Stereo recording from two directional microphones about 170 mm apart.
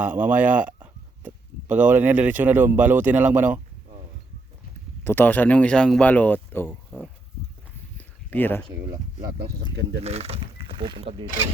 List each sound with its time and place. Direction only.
0.0 s speech: 10° right (ahead or behind)
5.0 s speech: 10° left (ahead or behind)
7.9 s a sound: 10° left (ahead or behind)
10.0 s speech: 40° right (ahead or behind)